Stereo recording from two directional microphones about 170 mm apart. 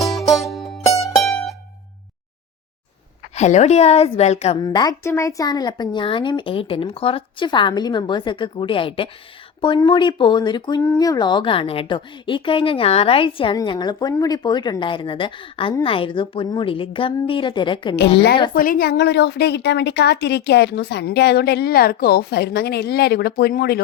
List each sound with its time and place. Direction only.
0.0 s music: centre (ahead or behind)
0.9 s music: 20° left (ahead or behind)
1.2 s music: centre (ahead or behind)
3.3 s a woman's voice: 40° left (ahead or behind)
4.5 s speech: 25° left (ahead or behind)
18.5 s a woman's voice: 55° left (ahead or behind)